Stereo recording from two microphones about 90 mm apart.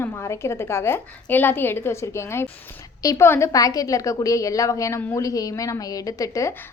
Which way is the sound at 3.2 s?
25° left (ahead or behind).